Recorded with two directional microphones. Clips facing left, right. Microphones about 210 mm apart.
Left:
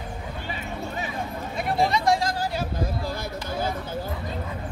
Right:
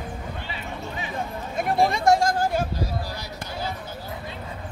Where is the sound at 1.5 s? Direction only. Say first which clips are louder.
Right 2 dB; 50° right (ahead or behind).